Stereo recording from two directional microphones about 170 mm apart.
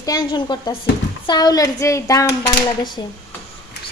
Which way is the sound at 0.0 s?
25° left (ahead or behind).